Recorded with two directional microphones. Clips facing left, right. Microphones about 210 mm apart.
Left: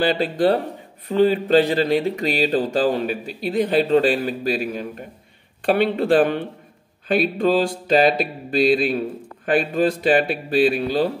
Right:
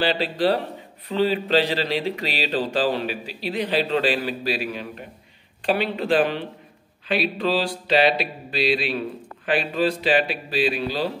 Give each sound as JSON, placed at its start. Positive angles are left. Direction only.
{"t": 0.0, "sound": "speech", "side_deg": 45}